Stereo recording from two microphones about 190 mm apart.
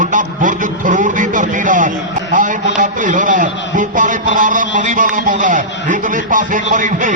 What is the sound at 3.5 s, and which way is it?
Speech, 70° left (ahead or behind).